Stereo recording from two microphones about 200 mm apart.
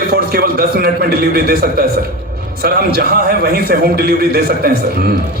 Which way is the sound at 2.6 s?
50° right (ahead or behind).